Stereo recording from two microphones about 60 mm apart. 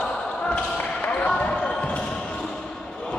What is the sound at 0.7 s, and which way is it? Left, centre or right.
Basketball bounce, left.